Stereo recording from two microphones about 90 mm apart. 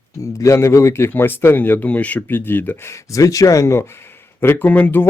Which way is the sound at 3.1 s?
40° left (ahead or behind).